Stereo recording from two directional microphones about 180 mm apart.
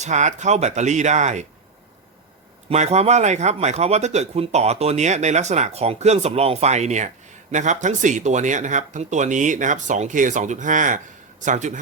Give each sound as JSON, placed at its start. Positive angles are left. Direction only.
{"t": 0.0, "sound": "speech", "side_deg": -40}
{"t": 2.6, "sound": "speech", "side_deg": -40}